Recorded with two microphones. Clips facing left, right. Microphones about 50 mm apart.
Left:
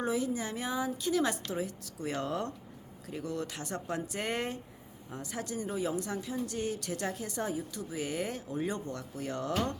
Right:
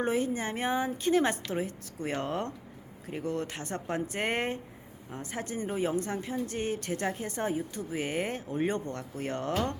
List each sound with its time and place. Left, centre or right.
0.0 s speech: right